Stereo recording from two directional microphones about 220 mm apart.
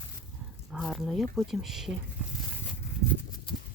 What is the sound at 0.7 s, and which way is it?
Speech, centre (ahead or behind).